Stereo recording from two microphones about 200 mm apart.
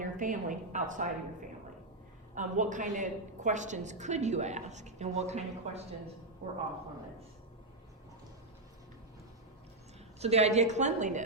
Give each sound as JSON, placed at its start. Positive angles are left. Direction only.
{"t": 0.0, "sound": "a woman's voice", "side_deg": -40}
{"t": 10.2, "sound": "a woman's voice", "side_deg": -30}